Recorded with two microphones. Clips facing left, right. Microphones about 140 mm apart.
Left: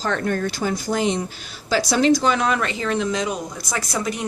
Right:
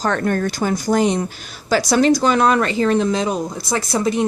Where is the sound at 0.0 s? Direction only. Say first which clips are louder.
Right 4 dB; 50° right (ahead or behind).